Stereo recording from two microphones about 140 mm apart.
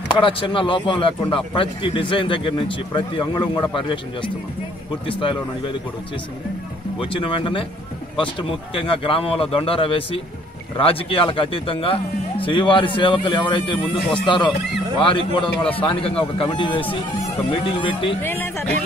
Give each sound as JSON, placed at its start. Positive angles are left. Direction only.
{"t": 0.1, "sound": "speech", "side_deg": 40}
{"t": 7.0, "sound": "speech", "side_deg": 40}
{"t": 18.2, "sound": "speech", "side_deg": 15}